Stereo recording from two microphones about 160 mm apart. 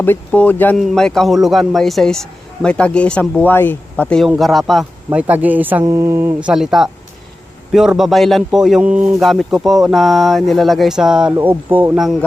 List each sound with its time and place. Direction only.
0.0 s a man's voice: 10° left (ahead or behind)
5.0 s a man's voice: 10° right (ahead or behind)